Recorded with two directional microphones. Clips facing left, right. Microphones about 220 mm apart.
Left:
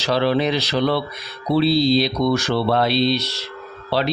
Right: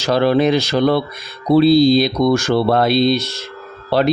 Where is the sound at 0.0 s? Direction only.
45° right (ahead or behind).